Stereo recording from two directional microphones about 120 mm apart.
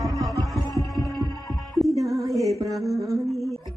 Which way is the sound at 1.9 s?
25° right (ahead or behind).